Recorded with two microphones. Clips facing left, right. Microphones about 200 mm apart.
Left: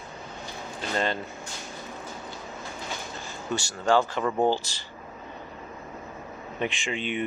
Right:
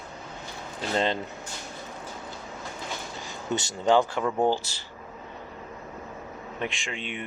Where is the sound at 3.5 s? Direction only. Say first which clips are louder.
Right 1 dB; 20° right (ahead or behind).